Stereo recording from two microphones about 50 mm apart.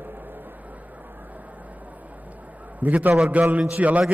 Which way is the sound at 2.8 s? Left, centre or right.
Right.